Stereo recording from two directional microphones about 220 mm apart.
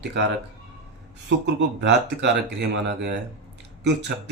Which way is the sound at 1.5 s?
50° right (ahead or behind).